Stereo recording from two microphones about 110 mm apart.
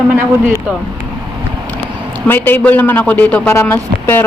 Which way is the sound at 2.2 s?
15° left (ahead or behind).